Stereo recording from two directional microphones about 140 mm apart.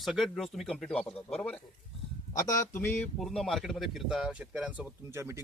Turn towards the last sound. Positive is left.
turn(degrees=-20)  # may be behind; listen again after turning